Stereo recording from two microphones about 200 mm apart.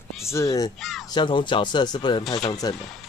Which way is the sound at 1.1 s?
25° left (ahead or behind).